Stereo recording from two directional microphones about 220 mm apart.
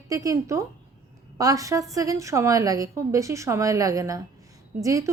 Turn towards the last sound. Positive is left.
turn(degrees=-15)  # may be behind; listen again after turning